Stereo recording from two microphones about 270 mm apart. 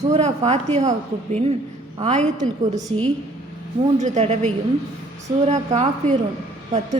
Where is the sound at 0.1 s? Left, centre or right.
Right.